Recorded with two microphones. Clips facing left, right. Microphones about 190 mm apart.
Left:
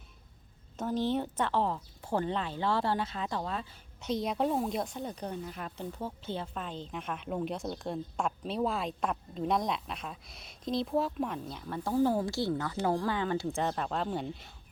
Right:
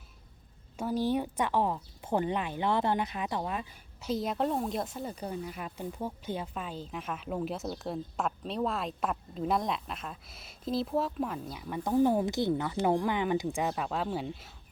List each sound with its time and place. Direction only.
0.8 s speech: 10° right (ahead or behind)
4.0 s speech: centre (ahead or behind)
11.8 s speech: 15° right (ahead or behind)